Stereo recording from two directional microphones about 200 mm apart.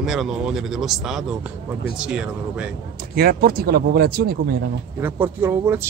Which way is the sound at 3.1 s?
50° right (ahead or behind).